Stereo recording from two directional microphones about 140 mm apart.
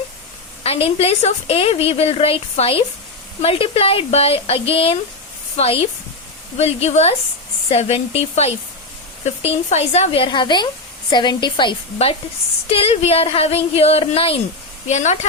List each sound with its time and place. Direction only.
0.6 s a woman's voice: 45° left (ahead or behind)
12.7 s a woman's voice: 45° left (ahead or behind)
14.8 s speech: 55° left (ahead or behind)